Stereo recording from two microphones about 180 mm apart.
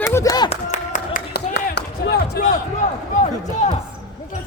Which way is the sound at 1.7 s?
60° left (ahead or behind).